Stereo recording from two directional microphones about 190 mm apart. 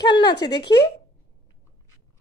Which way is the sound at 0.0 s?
25° left (ahead or behind).